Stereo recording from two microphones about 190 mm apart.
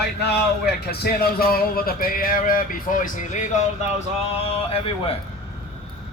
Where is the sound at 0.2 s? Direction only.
55° left (ahead or behind); by 3.6 s 40° left (ahead or behind).